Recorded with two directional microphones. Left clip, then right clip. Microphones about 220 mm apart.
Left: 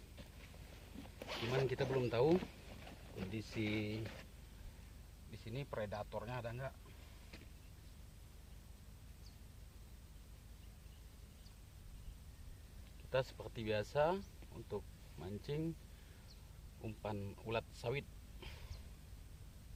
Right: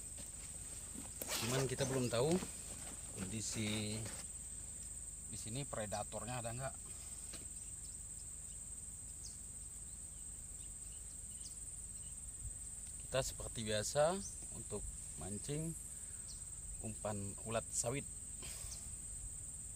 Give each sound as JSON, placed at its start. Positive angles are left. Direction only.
{"t": 1.2, "sound": "speech", "side_deg": 10}
{"t": 5.3, "sound": "speech", "side_deg": 15}
{"t": 13.1, "sound": "speech", "side_deg": 20}
{"t": 16.8, "sound": "speech", "side_deg": 20}